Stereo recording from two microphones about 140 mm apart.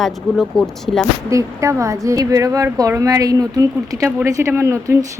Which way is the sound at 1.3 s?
20° right (ahead or behind).